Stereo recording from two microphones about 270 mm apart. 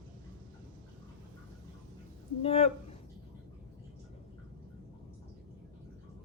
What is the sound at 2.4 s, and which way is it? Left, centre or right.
Speech, left.